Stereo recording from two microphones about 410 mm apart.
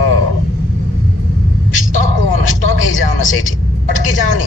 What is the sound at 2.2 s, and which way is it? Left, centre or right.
A man's voice, left.